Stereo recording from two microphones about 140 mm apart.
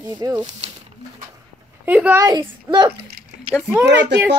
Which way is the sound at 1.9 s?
10° right (ahead or behind).